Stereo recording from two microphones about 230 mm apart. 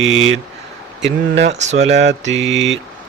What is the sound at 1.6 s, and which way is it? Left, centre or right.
Mantra, right.